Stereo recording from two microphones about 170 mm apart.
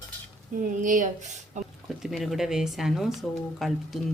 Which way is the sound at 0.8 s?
50° right (ahead or behind).